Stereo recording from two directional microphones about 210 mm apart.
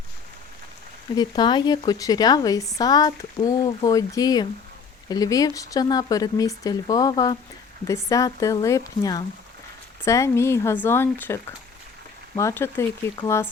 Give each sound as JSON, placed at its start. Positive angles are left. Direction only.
{"t": 1.1, "sound": "speech", "side_deg": 20}
{"t": 12.4, "sound": "speech", "side_deg": 10}